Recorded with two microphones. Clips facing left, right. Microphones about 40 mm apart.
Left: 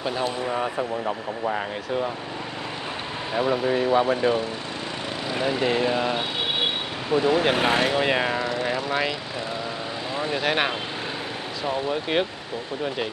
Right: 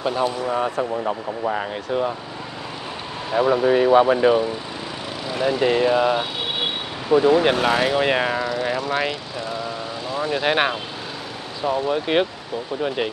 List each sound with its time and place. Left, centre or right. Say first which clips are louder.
0.0 s speech: right 4 dB; centre
3.3 s speech: right 5 dB; centre
3.7 s speech: right 7 dB; centre
5.3 s speech: right 4 dB; centre
7.5 s speech: right 2 dB; left
8.0 s speech: right 3 dB; centre
8.6 s vehicle: right 2 dB; centre
10.4 s speech: right 4 dB; centre
11.9 s speech: right 4 dB; centre